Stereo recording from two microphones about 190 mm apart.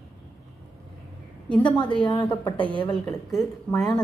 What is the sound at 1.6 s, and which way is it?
Speech, 25° left (ahead or behind).